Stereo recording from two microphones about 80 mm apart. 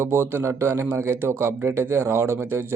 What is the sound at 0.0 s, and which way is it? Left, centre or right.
A man's voice, right.